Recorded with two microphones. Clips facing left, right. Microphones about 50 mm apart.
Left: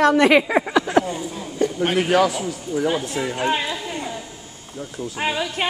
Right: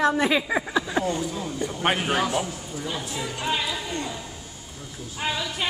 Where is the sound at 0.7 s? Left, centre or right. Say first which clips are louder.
Left 8 dB; left.